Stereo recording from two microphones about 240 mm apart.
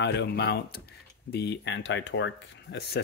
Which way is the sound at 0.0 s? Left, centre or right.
Left.